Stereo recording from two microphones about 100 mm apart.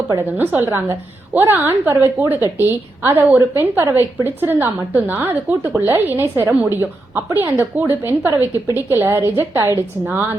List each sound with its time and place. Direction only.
0.2 s a woman's voice: 20° right (ahead or behind)